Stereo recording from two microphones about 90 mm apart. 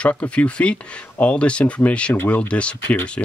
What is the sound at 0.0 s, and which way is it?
Speech, 15° left (ahead or behind).